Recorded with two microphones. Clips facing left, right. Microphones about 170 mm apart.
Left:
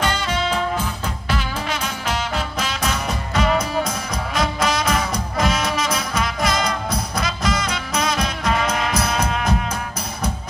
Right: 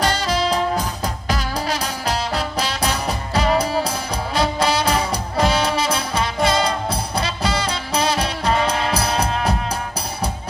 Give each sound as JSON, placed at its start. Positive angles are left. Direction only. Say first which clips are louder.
{"t": 0.0, "sound": "music", "louder": "right 2 dB", "side_deg": -35}